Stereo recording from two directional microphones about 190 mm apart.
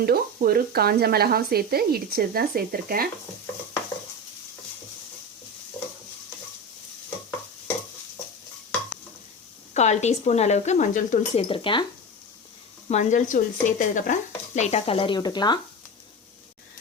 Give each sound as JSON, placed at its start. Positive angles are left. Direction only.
{"t": 0.0, "sound": "speech", "side_deg": -50}
{"t": 9.7, "sound": "speech", "side_deg": 35}
{"t": 11.4, "sound": "speech", "side_deg": 25}
{"t": 12.9, "sound": "speech", "side_deg": 40}